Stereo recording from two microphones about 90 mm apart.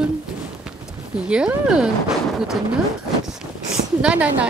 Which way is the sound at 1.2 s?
10° right (ahead or behind).